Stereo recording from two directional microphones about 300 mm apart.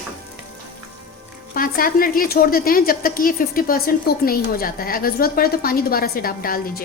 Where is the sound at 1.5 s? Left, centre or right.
Left.